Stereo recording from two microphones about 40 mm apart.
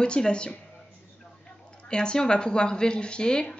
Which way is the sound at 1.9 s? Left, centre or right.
Left.